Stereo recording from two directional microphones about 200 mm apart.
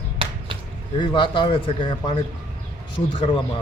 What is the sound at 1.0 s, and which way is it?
A man's voice, 25° left (ahead or behind).